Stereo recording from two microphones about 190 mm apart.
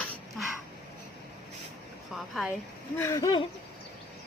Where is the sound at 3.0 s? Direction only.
15° left (ahead or behind).